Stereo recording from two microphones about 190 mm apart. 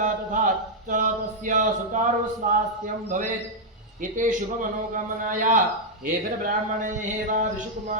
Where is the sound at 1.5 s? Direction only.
40° right (ahead or behind).